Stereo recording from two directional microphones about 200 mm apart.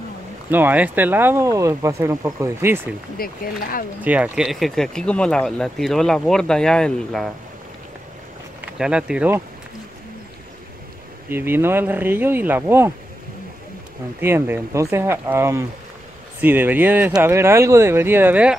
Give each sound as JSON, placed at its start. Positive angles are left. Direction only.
{"t": 0.5, "sound": "speech", "side_deg": -10}
{"t": 3.2, "sound": "speech", "side_deg": 50}
{"t": 4.0, "sound": "speech", "side_deg": -5}
{"t": 8.5, "sound": "speech", "side_deg": -5}
{"t": 11.2, "sound": "speech", "side_deg": -10}
{"t": 14.2, "sound": "speech", "side_deg": -10}